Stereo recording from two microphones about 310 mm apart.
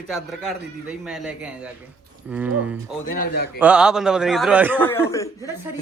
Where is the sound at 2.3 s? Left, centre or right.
Centre.